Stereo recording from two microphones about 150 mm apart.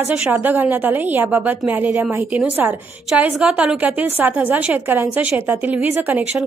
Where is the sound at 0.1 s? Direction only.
10° right (ahead or behind).